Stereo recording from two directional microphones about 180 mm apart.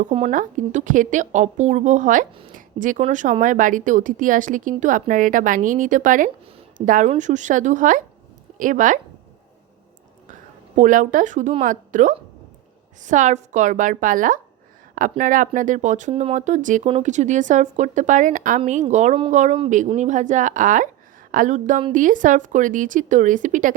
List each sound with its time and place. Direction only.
0.1 s a woman's voice: 40° right (ahead or behind)
10.8 s a woman's voice: 45° right (ahead or behind)